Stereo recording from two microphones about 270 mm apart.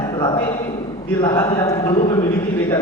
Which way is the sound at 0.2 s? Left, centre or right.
Centre.